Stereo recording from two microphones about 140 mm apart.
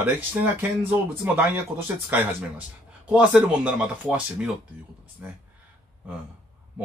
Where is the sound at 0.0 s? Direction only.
15° right (ahead or behind).